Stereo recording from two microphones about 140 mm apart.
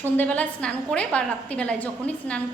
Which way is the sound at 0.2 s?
10° left (ahead or behind).